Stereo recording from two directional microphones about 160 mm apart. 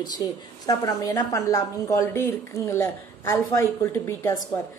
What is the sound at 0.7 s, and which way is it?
A woman's voice, 25° left (ahead or behind).